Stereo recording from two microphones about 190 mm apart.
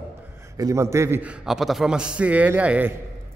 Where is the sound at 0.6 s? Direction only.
15° right (ahead or behind).